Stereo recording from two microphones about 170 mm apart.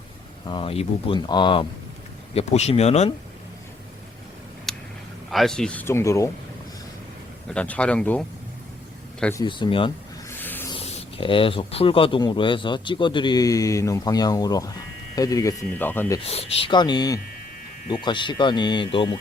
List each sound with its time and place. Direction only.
0.4 s speech: 30° left (ahead or behind)
2.3 s speech: 40° left (ahead or behind)
4.7 s a sound: centre (ahead or behind)
5.3 s speech: centre (ahead or behind); by 6.3 s 20° left (ahead or behind)
7.4 s speech: 5° left (ahead or behind)
9.3 s speech: 25° left (ahead or behind)
10.2 s a sound: 10° left (ahead or behind)
10.7 s speech: 35° left (ahead or behind); by 16.2 s 15° left (ahead or behind)
16.2 s speech: 35° left (ahead or behind)